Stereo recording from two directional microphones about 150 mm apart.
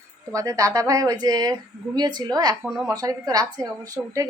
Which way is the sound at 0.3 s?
20° right (ahead or behind).